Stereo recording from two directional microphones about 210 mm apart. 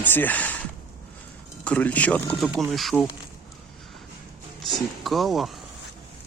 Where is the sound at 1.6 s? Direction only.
5° left (ahead or behind).